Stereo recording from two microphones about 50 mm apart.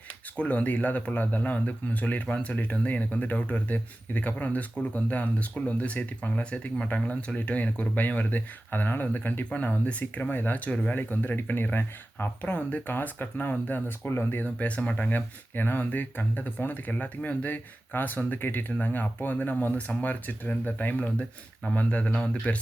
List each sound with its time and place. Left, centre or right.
0.3 s speech: left
14.4 s speech: left